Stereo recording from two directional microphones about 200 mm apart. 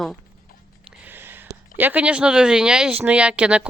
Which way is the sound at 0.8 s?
10° right (ahead or behind).